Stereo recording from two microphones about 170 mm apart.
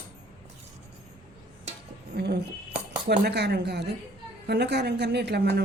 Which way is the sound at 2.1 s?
70° right (ahead or behind).